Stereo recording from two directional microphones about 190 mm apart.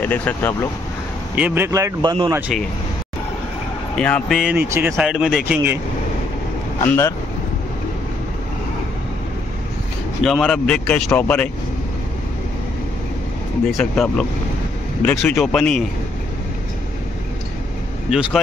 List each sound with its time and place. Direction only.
0.0 s speech: 10° left (ahead or behind)
1.3 s speech: 10° right (ahead or behind)
3.9 s speech: 5° left (ahead or behind)
6.8 s speech: 15° left (ahead or behind)
10.2 s speech: centre (ahead or behind)
13.7 s speech: centre (ahead or behind)
18.1 s speech: 5° right (ahead or behind)